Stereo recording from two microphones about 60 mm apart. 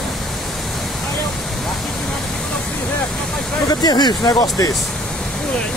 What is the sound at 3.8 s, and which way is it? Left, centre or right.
Speech, left.